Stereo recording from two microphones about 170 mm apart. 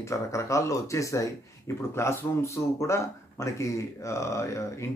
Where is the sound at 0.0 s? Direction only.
15° left (ahead or behind).